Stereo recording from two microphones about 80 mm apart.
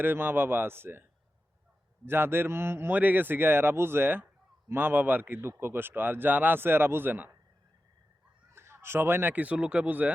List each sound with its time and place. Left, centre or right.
0.0 s a man's voice: right
2.0 s a man's voice: right
8.5 s speech: right